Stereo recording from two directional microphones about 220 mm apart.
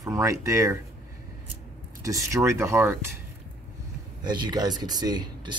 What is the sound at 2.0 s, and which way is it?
Speech, 15° right (ahead or behind).